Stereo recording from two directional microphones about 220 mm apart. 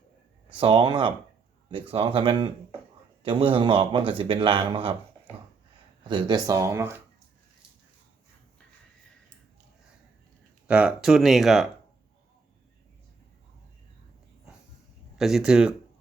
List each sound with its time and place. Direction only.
0.6 s speech: 20° right (ahead or behind)
6.1 s speech: 20° right (ahead or behind)
10.7 s speech: 5° right (ahead or behind)
15.2 s speech: centre (ahead or behind)